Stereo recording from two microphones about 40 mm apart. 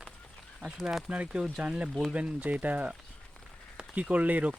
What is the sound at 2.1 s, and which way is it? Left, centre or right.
Speech, right.